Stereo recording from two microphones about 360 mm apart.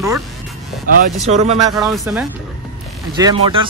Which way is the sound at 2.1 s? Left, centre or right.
Centre.